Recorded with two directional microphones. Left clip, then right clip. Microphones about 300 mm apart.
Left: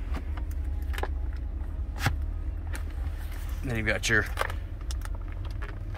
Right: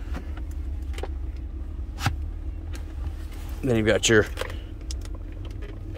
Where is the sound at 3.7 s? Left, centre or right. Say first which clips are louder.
Right 7 dB; right.